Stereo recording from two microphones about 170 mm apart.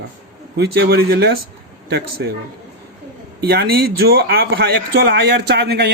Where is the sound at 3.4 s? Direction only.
70° right (ahead or behind).